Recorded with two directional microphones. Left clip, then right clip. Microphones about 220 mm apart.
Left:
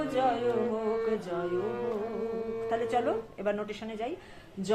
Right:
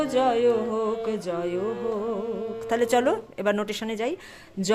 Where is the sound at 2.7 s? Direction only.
50° right (ahead or behind).